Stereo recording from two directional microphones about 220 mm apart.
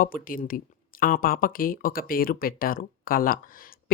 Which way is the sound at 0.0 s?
40° left (ahead or behind).